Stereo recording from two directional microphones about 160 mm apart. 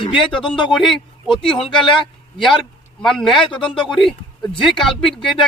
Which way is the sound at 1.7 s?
30° left (ahead or behind).